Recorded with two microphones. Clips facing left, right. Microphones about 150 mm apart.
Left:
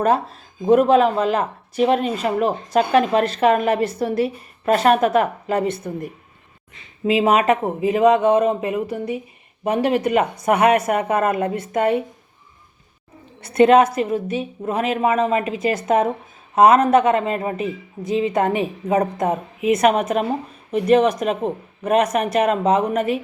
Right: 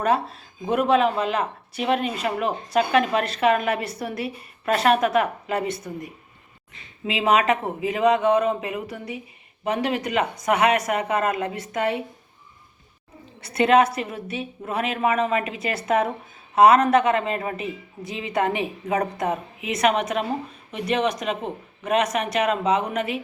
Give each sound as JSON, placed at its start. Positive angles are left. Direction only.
{"t": 0.0, "sound": "speech", "side_deg": 40}
{"t": 7.0, "sound": "speech", "side_deg": 40}
{"t": 13.4, "sound": "speech", "side_deg": 45}